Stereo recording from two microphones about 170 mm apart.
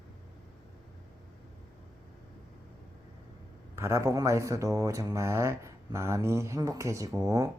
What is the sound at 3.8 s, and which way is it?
Speech, 15° right (ahead or behind).